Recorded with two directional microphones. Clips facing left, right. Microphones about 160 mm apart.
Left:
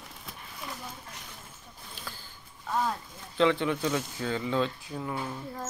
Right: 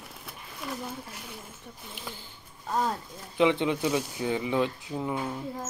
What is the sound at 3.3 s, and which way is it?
Speech, 15° right (ahead or behind).